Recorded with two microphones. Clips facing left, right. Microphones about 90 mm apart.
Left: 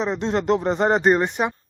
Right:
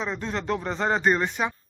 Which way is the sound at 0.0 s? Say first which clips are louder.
Left 7 dB; 20° left (ahead or behind).